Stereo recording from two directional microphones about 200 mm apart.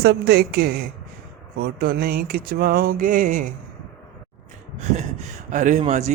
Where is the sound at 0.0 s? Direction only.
55° right (ahead or behind).